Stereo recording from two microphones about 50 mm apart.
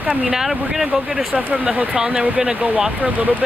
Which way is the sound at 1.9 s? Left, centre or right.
Centre.